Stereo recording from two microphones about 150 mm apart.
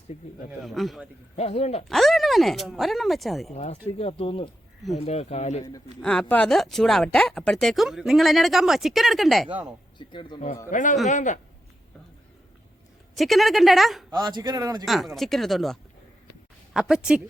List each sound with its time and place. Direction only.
0.6 s speech: centre (ahead or behind)
1.4 s speech: 45° left (ahead or behind)
1.9 s speech: centre (ahead or behind)
3.5 s speech: 50° left (ahead or behind)
6.0 s speech: 5° left (ahead or behind)
10.0 s speech: 30° left (ahead or behind)
10.7 s a man's voice: 60° left (ahead or behind)
13.1 s speech: centre (ahead or behind)
14.1 s a man's voice: 30° right (ahead or behind)
14.8 s speech: centre (ahead or behind)